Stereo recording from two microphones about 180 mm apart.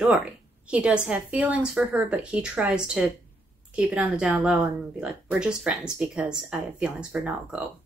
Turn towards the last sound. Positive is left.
turn(degrees=-5)  # may be behind; listen again after turning